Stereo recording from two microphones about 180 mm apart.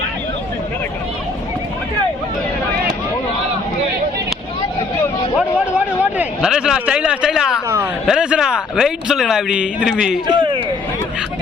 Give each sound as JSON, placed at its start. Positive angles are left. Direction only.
{"t": 5.4, "sound": "a sound", "side_deg": -5}
{"t": 8.0, "sound": "a man's voice", "side_deg": -5}
{"t": 10.2, "sound": "speech", "side_deg": -25}